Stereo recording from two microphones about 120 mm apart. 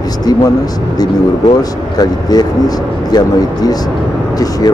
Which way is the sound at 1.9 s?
35° left (ahead or behind).